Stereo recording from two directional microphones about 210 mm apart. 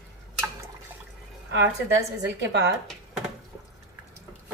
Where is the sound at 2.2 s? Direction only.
55° right (ahead or behind).